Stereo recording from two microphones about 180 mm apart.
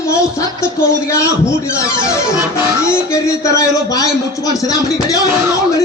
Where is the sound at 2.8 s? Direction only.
15° left (ahead or behind).